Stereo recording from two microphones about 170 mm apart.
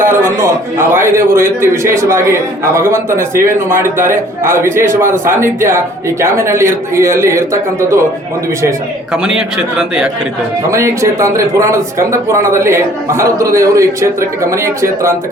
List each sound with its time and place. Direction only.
0.0 s speech: 15° right (ahead or behind)
9.1 s a man's voice: 5° right (ahead or behind)
10.7 s speech: 15° right (ahead or behind)